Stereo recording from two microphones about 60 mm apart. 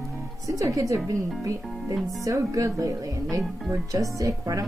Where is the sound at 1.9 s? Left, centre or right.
Centre.